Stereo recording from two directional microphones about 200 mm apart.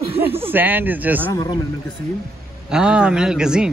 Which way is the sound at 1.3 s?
20° left (ahead or behind).